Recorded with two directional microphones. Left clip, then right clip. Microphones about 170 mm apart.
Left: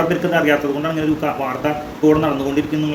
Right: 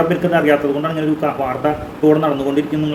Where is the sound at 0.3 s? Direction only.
15° right (ahead or behind).